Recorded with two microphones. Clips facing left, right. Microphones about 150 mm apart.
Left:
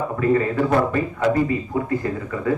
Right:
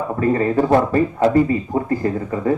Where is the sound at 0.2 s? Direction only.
35° right (ahead or behind).